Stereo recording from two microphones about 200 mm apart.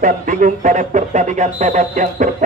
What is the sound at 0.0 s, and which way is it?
Speech, 40° right (ahead or behind).